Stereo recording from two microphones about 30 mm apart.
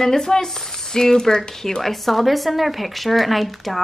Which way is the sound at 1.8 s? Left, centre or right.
Centre.